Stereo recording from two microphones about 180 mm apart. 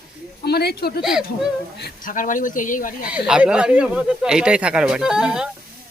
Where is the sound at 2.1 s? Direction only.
45° left (ahead or behind).